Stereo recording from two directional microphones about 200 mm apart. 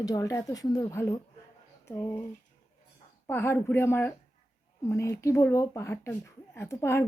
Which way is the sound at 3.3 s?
10° left (ahead or behind).